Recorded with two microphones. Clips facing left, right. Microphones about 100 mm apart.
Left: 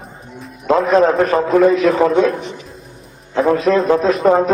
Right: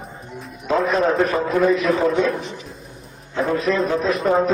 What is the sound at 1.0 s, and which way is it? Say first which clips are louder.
Speech: left 5 dB; 75° left (ahead or behind).